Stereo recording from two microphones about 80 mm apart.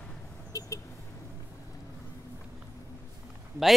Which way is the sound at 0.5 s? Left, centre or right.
Left.